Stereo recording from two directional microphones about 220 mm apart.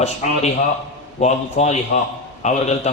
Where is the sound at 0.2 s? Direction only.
30° left (ahead or behind).